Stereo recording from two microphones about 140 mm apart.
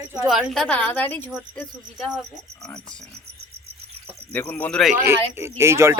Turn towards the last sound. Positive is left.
turn(degrees=-20)  # may be behind; listen again after turning